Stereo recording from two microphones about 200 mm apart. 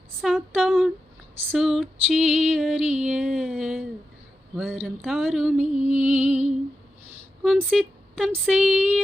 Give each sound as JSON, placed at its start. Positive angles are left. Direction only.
{"t": 0.2, "sound": "female singing", "side_deg": 0}
{"t": 5.7, "sound": "music", "side_deg": -35}
{"t": 7.4, "sound": "speech", "side_deg": 0}
{"t": 8.3, "sound": "female singing", "side_deg": -5}